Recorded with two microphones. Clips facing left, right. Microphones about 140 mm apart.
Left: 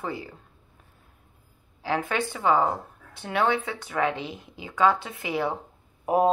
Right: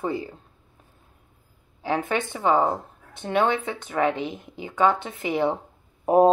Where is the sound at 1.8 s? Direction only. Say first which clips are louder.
Right 2 dB; 20° right (ahead or behind).